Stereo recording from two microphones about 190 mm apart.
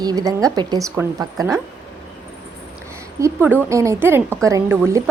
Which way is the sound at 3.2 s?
10° right (ahead or behind).